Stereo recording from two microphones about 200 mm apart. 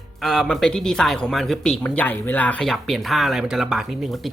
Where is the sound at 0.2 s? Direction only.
Centre (ahead or behind).